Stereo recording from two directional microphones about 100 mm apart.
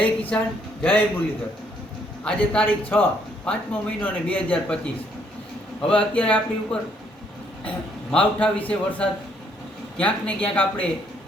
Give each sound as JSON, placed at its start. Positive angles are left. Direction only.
{"t": 0.0, "sound": "a man's voice", "side_deg": 15}
{"t": 2.2, "sound": "a man's voice", "side_deg": 15}
{"t": 5.8, "sound": "a man's voice", "side_deg": 10}
{"t": 8.1, "sound": "a man's voice", "side_deg": 10}